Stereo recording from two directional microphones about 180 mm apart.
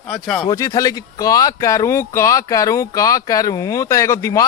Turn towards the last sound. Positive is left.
turn(degrees=15)  # may be behind; listen again after turning